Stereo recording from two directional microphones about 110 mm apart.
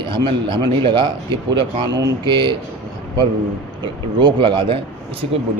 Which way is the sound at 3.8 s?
45° right (ahead or behind).